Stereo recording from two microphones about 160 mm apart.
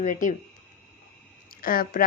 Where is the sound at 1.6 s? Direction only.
65° left (ahead or behind).